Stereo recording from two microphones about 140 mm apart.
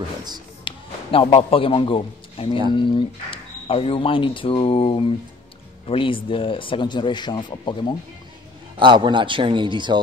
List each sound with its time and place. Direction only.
0.7 s a man's voice: 40° left (ahead or behind)
8.7 s speech: 35° right (ahead or behind)